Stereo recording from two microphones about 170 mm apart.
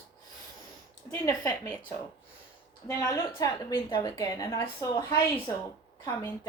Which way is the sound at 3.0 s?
20° left (ahead or behind).